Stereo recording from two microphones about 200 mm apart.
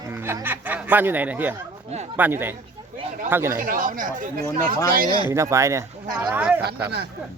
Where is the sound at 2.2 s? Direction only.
10° right (ahead or behind).